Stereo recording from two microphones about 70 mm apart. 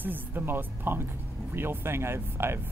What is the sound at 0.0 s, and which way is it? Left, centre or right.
Speech, right.